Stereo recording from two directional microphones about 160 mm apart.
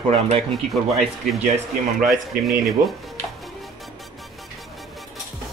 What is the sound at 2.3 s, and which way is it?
Speech, 70° right (ahead or behind).